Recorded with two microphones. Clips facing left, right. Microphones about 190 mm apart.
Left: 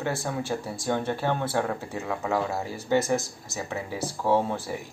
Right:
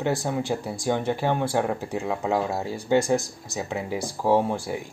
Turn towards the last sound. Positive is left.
turn(degrees=-15)  # may be behind; listen again after turning